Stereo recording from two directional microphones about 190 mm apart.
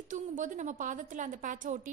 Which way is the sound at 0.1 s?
40° right (ahead or behind).